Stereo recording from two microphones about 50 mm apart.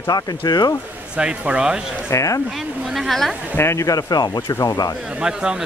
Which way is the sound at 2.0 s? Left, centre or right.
Left.